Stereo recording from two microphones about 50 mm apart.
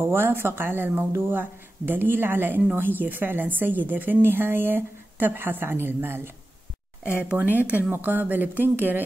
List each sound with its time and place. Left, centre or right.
0.0 s a woman's voice: right
7.1 s speech: right